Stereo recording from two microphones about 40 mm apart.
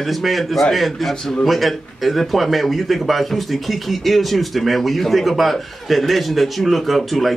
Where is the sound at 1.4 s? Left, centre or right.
Centre.